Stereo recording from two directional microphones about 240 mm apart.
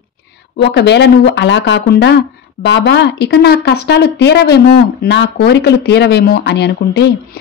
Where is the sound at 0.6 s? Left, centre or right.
Left.